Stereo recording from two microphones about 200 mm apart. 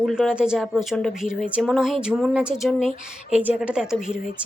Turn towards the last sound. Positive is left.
turn(degrees=-5)  # may be behind; listen again after turning